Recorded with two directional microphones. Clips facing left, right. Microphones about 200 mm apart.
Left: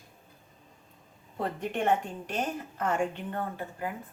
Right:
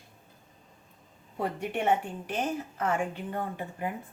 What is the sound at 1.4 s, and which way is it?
A woman's voice, 10° right (ahead or behind).